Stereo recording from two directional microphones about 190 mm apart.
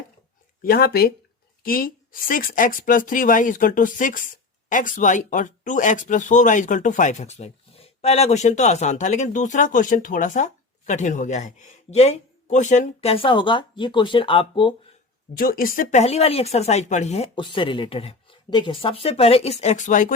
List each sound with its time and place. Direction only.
0.6 s speech: 55° left (ahead or behind); by 14.8 s 25° left (ahead or behind)
15.4 s speech: 50° left (ahead or behind)